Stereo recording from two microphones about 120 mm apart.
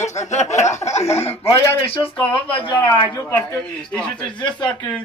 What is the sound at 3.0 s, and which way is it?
A man's voice, 25° left (ahead or behind).